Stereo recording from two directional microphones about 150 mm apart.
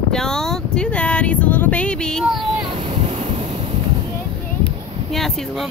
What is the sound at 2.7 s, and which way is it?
Waves, 40° right (ahead or behind).